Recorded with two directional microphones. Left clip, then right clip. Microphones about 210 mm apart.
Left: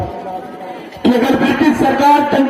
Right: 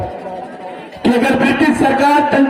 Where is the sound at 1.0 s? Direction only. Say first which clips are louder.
Even; 40° right (ahead or behind).